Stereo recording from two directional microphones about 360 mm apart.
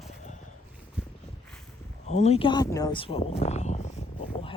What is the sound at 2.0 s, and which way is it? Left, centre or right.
Speech, centre.